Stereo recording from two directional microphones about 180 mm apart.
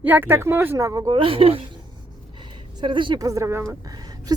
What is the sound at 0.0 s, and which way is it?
Speech, 10° right (ahead or behind).